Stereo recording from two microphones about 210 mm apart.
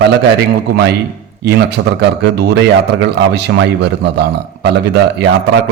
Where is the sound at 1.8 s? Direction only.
70° right (ahead or behind).